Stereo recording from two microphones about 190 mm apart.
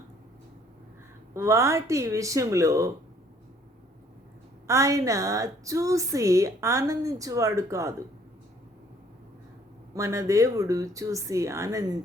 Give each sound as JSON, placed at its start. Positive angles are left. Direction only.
{"t": 1.3, "sound": "a woman's voice", "side_deg": -15}
{"t": 4.6, "sound": "a woman's voice", "side_deg": -15}
{"t": 9.9, "sound": "a woman's voice", "side_deg": -15}